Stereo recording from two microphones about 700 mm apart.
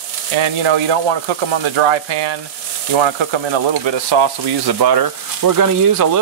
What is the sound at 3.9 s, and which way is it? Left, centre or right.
Speech, right.